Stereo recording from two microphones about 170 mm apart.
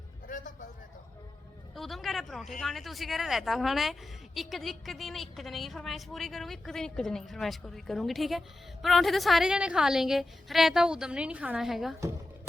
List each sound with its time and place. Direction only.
0.3 s music: 50° left (ahead or behind)
1.7 s a woman's voice: centre (ahead or behind)